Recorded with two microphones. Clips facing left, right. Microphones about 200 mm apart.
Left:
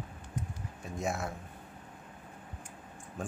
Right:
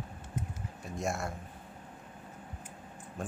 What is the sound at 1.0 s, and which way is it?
Speech, centre (ahead or behind).